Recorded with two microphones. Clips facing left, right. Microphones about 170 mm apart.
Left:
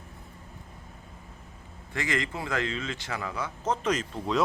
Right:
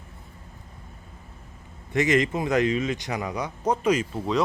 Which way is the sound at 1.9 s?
20° right (ahead or behind).